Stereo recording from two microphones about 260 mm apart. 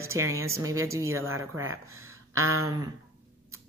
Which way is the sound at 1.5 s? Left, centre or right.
Right.